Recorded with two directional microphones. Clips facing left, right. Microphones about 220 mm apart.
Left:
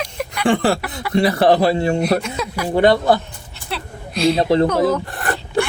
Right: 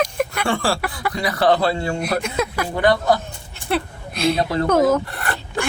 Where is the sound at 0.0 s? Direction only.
50° right (ahead or behind).